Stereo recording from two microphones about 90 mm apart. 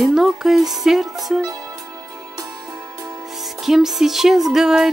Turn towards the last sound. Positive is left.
turn(degrees=-5)  # may be behind; listen again after turning